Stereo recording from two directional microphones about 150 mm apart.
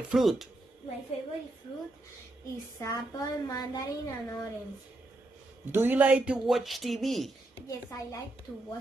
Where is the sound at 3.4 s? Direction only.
25° left (ahead or behind).